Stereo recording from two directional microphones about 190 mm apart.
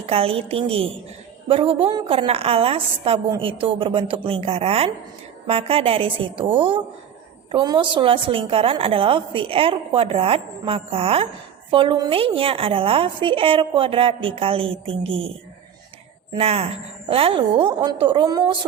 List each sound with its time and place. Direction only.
0.0 s a woman's voice: 30° right (ahead or behind)
16.3 s a woman's voice: 30° right (ahead or behind)